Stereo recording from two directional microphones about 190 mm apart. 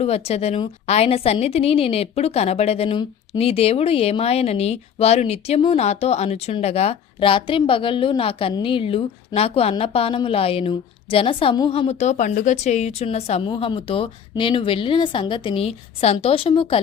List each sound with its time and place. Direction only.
0.3 s a woman's voice: 35° left (ahead or behind)